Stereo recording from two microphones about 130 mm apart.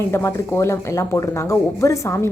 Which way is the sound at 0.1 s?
20° left (ahead or behind).